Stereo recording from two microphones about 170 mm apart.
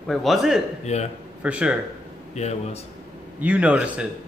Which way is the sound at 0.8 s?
40° left (ahead or behind).